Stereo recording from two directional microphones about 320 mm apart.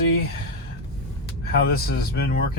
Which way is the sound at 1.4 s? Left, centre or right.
Left.